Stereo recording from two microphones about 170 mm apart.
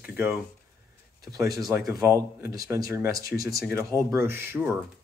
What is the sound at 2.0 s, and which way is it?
Speech, 20° right (ahead or behind).